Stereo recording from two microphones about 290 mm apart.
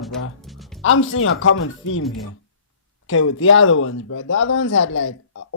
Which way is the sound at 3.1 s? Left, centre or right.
Left.